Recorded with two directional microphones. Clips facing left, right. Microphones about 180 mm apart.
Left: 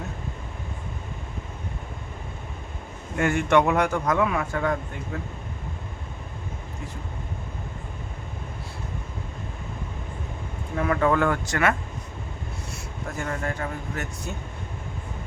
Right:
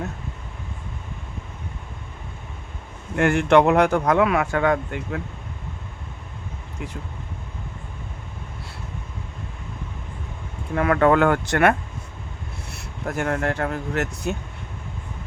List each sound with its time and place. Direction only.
3.2 s speech: 65° right (ahead or behind)
10.8 s speech: 65° right (ahead or behind)